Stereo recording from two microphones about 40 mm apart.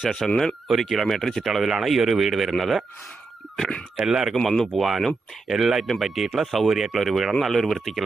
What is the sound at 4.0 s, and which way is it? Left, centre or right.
Speech, centre.